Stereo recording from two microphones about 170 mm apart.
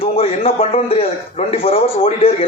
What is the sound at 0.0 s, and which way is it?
A man's voice, 35° left (ahead or behind).